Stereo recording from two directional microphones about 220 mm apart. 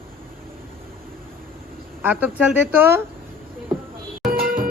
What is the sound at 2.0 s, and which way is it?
Speech, 5° right (ahead or behind).